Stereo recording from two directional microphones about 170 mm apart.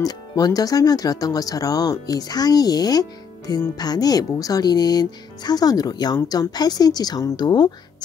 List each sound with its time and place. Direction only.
0.0 s speech: 20° left (ahead or behind)